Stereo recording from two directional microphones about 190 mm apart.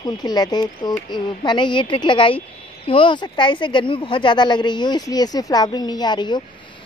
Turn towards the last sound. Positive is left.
turn(degrees=25)  # may be behind; listen again after turning